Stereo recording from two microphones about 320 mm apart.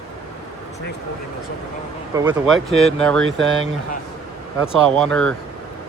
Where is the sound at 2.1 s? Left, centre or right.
Centre.